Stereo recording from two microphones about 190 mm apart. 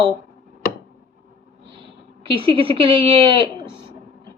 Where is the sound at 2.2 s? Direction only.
30° right (ahead or behind).